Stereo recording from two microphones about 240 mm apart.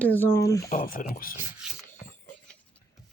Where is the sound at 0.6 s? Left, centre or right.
Left.